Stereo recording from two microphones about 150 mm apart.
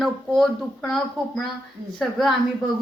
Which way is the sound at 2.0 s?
Centre (ahead or behind).